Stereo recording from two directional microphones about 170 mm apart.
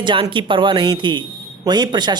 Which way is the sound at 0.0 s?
30° right (ahead or behind).